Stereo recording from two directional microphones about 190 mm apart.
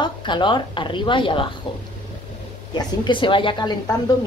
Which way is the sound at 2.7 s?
25° left (ahead or behind).